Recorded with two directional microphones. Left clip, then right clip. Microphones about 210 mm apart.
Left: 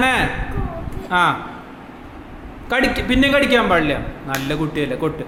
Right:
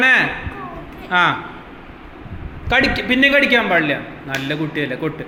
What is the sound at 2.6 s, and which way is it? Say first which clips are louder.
A man's voice: right 2 dB; 10° left (ahead or behind).